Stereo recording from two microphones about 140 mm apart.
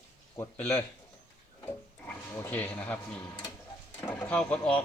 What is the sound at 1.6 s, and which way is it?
Speech, 15° left (ahead or behind).